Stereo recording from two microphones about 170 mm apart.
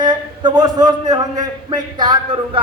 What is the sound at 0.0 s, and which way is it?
A man's voice, 25° right (ahead or behind).